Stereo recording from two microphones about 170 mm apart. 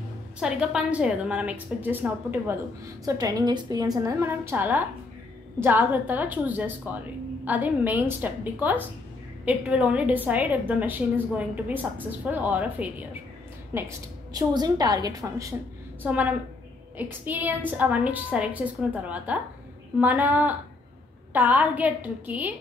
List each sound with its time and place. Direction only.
0.4 s a woman's voice: 5° right (ahead or behind); by 15.5 s 20° right (ahead or behind)
16.0 s a woman's voice: 10° right (ahead or behind)